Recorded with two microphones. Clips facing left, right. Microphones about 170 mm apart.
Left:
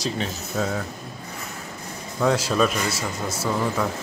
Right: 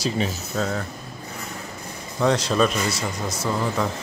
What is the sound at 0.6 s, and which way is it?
Speech, 5° left (ahead or behind).